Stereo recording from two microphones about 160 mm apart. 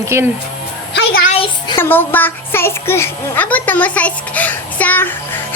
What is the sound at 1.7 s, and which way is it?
A child's voice, 15° left (ahead or behind).